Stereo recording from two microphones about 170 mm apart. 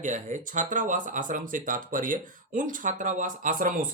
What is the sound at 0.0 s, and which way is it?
Speech, 45° right (ahead or behind).